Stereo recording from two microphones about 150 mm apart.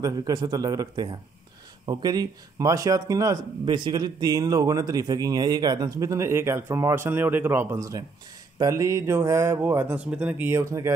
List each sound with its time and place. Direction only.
0.0 s speech: 25° right (ahead or behind)